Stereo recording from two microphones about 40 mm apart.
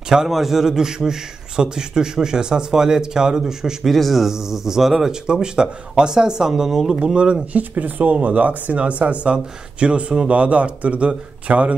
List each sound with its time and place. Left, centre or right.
0.3 s a man's voice: centre
3.9 s speech: centre
4.3 s a man's voice: centre
5.2 s a man's voice: centre
7.5 s speech: right